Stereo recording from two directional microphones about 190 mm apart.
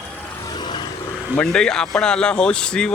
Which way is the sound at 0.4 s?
25° left (ahead or behind).